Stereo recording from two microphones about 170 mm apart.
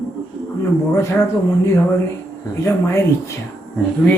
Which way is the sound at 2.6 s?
15° left (ahead or behind).